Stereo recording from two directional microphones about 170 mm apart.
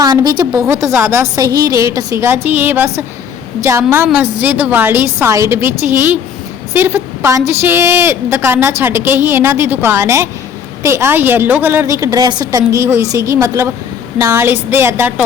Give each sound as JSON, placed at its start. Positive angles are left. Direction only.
{"t": 0.0, "sound": "a woman's voice", "side_deg": -25}